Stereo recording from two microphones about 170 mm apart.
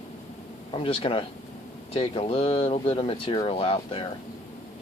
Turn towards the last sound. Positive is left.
turn(degrees=30)  # may be behind; listen again after turning